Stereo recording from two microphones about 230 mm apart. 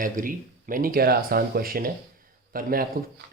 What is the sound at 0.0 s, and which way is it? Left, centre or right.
Speech, right.